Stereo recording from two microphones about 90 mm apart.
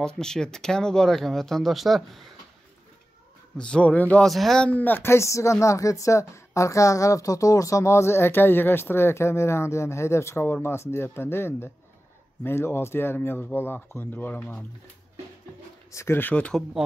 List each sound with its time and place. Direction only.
0.0 s speech: 5° left (ahead or behind)
3.5 s a man's voice: 10° left (ahead or behind)
4.2 s speech: centre (ahead or behind)
4.6 s speech: 20° left (ahead or behind)
15.9 s speech: 30° left (ahead or behind)
16.8 s speech: 5° right (ahead or behind)